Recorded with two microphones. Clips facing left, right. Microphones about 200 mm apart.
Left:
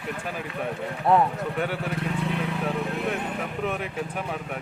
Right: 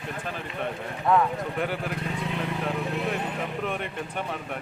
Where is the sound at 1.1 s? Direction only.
30° left (ahead or behind).